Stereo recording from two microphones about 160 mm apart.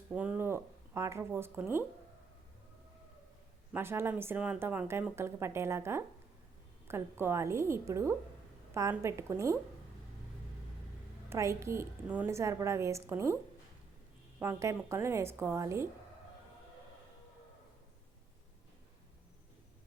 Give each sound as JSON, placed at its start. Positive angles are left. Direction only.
{"t": 0.1, "sound": "speech", "side_deg": -10}
{"t": 3.8, "sound": "speech", "side_deg": -15}
{"t": 11.3, "sound": "speech", "side_deg": -20}